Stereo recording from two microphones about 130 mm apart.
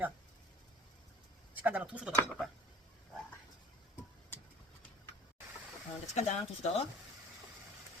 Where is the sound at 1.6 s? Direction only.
10° right (ahead or behind).